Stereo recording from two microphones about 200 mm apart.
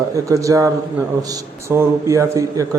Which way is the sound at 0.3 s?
15° right (ahead or behind).